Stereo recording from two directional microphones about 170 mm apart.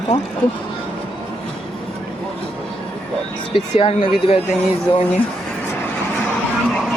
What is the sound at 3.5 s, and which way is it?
Speech, 30° left (ahead or behind).